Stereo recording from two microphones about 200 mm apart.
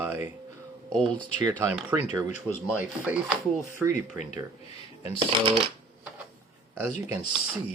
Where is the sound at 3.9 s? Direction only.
40° left (ahead or behind).